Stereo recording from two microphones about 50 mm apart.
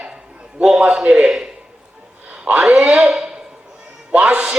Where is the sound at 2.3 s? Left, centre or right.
Right.